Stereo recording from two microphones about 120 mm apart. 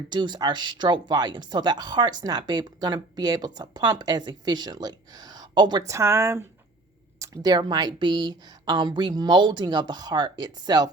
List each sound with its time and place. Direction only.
0.1 s speech: 40° right (ahead or behind)
5.9 s speech: 20° right (ahead or behind)
7.2 s speech: 35° right (ahead or behind)